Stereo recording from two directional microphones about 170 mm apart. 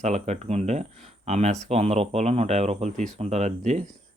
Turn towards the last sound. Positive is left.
turn(degrees=-40)  # may be behind; listen again after turning